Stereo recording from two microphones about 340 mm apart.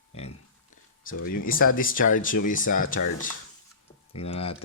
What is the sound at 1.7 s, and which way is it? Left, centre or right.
Speech, left.